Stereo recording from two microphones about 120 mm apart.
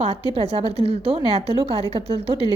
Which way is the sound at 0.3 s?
55° right (ahead or behind).